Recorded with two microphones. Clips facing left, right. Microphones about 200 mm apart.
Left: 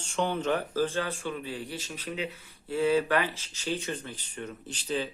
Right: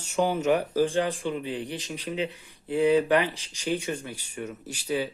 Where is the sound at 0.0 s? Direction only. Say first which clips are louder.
Right 4 dB; 10° right (ahead or behind).